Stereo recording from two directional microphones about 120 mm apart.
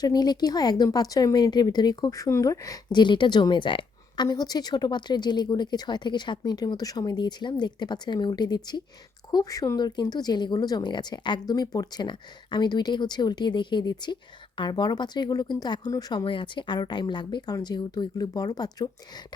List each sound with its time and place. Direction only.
0.0 s speech: 35° left (ahead or behind)
4.3 s speech: 35° left (ahead or behind)